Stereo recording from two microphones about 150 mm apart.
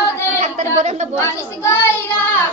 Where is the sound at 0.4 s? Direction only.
50° right (ahead or behind).